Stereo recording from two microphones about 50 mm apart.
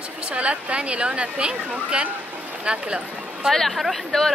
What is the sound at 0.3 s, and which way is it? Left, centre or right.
A woman's voice, right.